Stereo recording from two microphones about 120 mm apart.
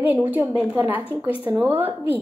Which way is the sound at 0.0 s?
15° right (ahead or behind).